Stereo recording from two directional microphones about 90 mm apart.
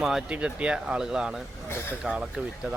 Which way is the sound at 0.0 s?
5° right (ahead or behind).